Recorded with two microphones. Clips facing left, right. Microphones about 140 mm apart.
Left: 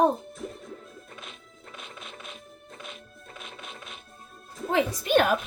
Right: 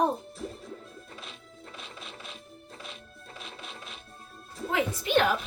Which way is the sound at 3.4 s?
30° right (ahead or behind).